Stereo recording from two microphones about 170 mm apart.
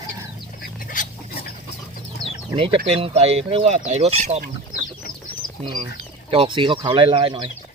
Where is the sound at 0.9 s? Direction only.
55° left (ahead or behind).